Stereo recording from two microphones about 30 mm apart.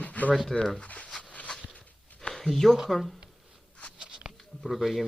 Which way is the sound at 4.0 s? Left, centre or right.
Right.